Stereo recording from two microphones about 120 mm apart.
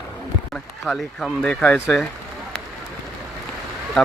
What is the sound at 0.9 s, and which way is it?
Speech, 5° left (ahead or behind).